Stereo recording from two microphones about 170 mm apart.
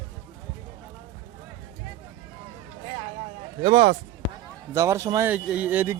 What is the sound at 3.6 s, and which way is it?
Speech, 35° right (ahead or behind).